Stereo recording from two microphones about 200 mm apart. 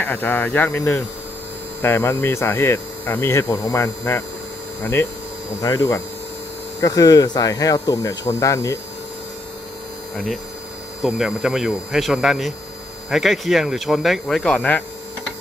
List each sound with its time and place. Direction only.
0.0 s speech: 10° left (ahead or behind)
11.0 s speech: 5° right (ahead or behind)